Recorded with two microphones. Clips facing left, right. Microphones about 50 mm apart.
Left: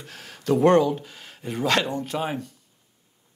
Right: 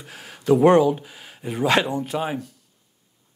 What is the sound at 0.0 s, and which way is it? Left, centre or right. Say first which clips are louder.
Speech: right 3 dB; centre.